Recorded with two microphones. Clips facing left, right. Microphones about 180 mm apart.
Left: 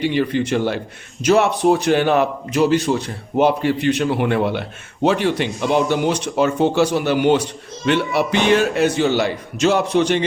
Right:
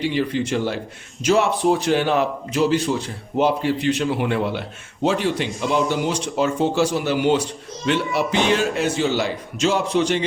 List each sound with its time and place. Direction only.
0.0 s a man's voice: 60° left (ahead or behind)